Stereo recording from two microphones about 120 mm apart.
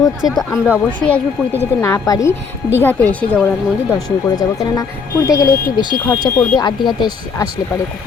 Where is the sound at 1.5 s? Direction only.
20° left (ahead or behind).